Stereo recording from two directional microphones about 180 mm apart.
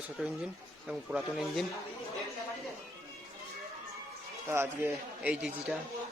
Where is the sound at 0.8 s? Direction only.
5° right (ahead or behind).